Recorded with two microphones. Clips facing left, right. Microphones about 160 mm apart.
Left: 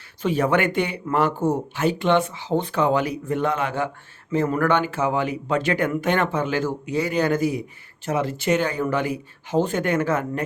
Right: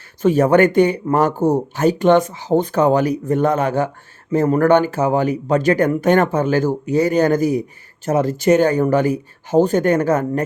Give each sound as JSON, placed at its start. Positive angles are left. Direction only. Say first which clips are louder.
{"t": 0.2, "sound": "speech", "louder": "right 8 dB", "side_deg": -45}